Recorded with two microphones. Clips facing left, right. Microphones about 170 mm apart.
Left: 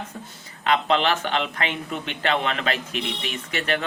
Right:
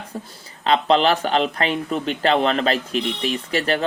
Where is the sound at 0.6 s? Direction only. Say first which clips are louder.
Right 4 dB; 35° right (ahead or behind).